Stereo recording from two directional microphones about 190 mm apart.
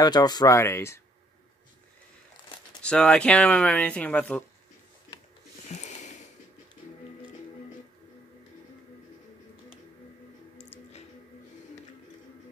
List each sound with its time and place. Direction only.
0.0 s speech: 20° left (ahead or behind)
2.8 s speech: 5° left (ahead or behind)
5.8 s a sound: 40° left (ahead or behind)